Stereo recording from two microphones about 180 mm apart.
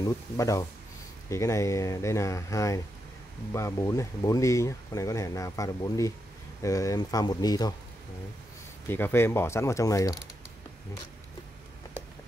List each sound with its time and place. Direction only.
0.0 s speech: 20° left (ahead or behind)
8.8 s speech: 10° left (ahead or behind)